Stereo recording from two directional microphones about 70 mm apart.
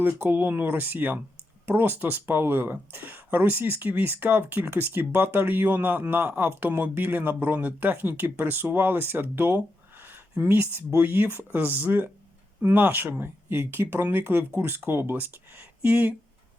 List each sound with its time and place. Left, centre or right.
0.0 s speech: right